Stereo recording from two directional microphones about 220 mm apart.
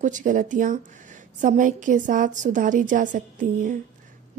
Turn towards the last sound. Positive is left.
turn(degrees=-35)  # may be behind; listen again after turning